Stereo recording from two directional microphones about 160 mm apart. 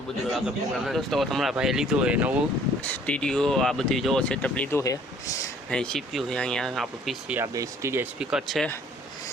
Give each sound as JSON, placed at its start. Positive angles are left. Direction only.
{"t": 0.3, "sound": "speech", "side_deg": 0}
{"t": 2.8, "sound": "speech", "side_deg": 10}
{"t": 4.8, "sound": "speech", "side_deg": 20}
{"t": 5.7, "sound": "speech", "side_deg": 5}
{"t": 7.3, "sound": "speech", "side_deg": -20}
{"t": 8.2, "sound": "speech", "side_deg": -5}